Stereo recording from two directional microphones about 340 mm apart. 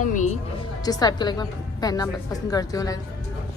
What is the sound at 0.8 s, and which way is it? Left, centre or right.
A woman's voice, centre.